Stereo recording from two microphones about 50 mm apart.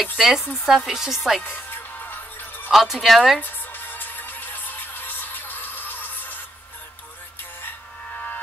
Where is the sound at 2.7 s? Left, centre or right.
Centre.